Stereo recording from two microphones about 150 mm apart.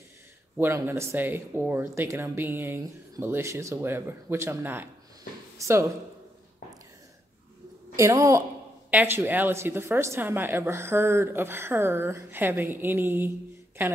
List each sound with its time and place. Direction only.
0.6 s a woman's voice: 15° right (ahead or behind)
7.9 s a woman's voice: 20° right (ahead or behind)